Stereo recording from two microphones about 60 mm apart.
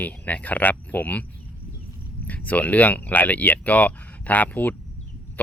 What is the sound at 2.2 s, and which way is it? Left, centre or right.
Speech, left.